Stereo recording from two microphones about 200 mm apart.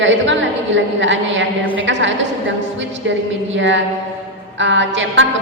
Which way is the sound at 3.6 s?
65° right (ahead or behind).